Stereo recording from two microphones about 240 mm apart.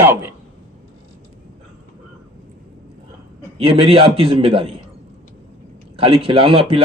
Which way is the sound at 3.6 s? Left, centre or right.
Right.